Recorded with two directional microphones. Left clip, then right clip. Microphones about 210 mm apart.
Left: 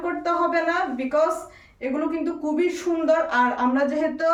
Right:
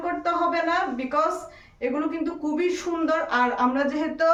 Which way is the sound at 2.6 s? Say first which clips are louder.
Left 1 dB; 10° right (ahead or behind).